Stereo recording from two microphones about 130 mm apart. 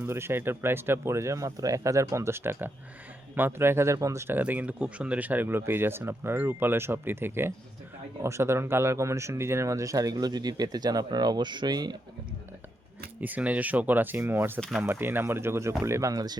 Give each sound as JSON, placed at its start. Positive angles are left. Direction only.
{"t": 0.0, "sound": "speech", "side_deg": -20}
{"t": 13.2, "sound": "speech", "side_deg": -10}